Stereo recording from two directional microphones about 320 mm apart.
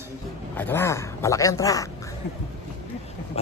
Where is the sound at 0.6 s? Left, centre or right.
Centre.